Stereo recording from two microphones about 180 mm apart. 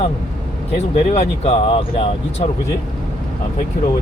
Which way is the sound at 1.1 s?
35° left (ahead or behind).